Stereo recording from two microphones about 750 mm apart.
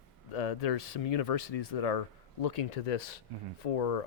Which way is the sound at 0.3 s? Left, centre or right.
Left.